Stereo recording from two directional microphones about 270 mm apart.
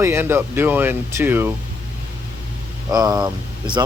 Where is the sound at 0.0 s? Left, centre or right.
Centre.